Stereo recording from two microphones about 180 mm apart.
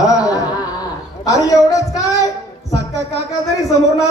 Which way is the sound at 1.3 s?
20° left (ahead or behind).